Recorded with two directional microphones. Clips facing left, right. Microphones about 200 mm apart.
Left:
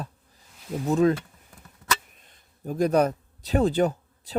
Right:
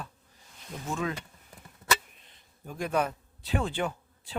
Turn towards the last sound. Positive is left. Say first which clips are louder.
# left 7 dB
turn(degrees=40)  # may be behind; listen again after turning